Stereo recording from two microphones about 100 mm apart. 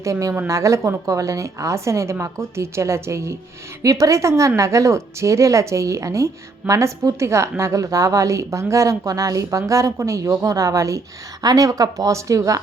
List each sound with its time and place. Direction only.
0.0 s a woman's voice: 30° right (ahead or behind)